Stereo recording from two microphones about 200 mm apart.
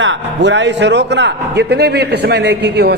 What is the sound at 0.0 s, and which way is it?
A man's voice, 65° right (ahead or behind).